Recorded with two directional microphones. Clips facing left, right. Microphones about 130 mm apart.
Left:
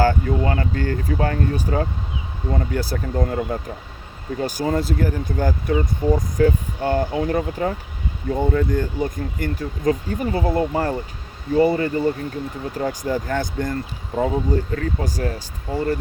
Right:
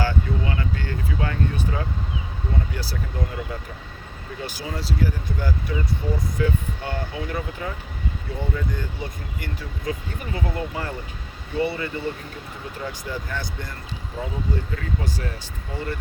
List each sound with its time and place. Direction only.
0.0 s speech: 45° left (ahead or behind)